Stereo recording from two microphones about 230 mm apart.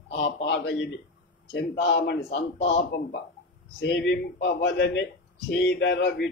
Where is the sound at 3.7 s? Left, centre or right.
Left.